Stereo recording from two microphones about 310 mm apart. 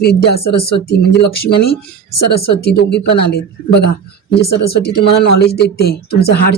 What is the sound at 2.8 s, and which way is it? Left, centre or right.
Speech, left.